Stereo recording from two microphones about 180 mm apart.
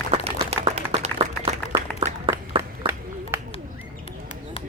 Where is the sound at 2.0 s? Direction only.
15° right (ahead or behind).